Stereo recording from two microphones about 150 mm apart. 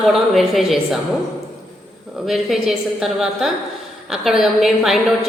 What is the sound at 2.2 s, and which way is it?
A woman's voice, centre (ahead or behind).